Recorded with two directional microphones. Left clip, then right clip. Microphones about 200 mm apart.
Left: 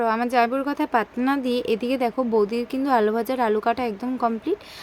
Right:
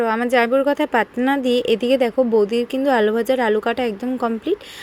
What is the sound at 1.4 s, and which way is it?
Speech, 30° left (ahead or behind).